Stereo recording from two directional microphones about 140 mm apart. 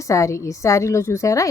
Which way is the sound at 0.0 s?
20° left (ahead or behind).